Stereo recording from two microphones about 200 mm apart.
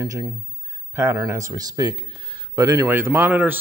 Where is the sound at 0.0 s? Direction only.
15° right (ahead or behind).